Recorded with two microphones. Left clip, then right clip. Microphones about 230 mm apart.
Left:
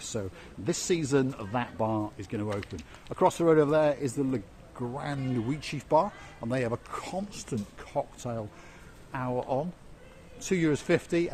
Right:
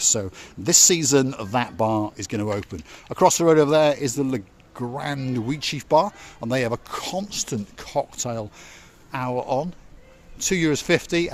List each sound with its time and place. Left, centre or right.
0.0 s speech: right